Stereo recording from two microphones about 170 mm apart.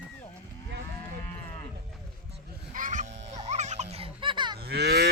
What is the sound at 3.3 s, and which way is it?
Music, 40° right (ahead or behind).